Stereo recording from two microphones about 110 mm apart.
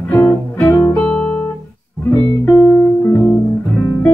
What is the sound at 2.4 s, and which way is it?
Music, 30° left (ahead or behind).